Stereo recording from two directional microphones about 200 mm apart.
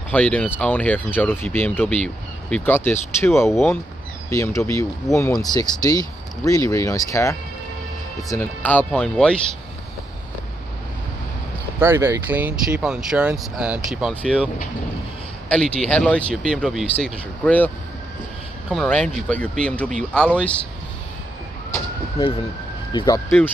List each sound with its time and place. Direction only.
0.1 s speech: 5° left (ahead or behind)
11.8 s speech: 10° right (ahead or behind); by 17.6 s 5° left (ahead or behind)
18.7 s speech: 5° left (ahead or behind)
22.9 s speech: 20° left (ahead or behind)